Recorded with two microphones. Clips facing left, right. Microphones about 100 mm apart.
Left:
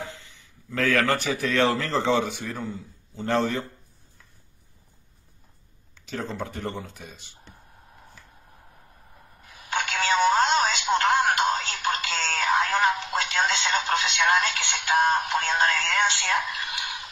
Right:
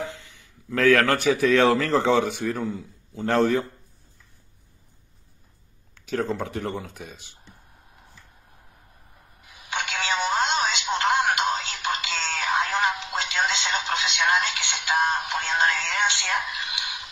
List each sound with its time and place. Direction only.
0.7 s a man's voice: centre (ahead or behind)
6.0 s a man's voice: 5° right (ahead or behind)
9.4 s telephone: 40° left (ahead or behind)